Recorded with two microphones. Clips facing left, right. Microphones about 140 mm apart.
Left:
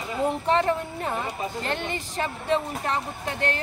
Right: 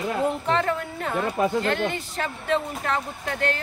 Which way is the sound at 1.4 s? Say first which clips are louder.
Right 8 dB; 60° right (ahead or behind).